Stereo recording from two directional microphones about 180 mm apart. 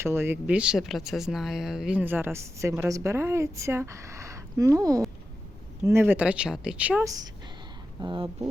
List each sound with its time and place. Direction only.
0.0 s speech: 15° right (ahead or behind)
7.0 s speech: 20° right (ahead or behind)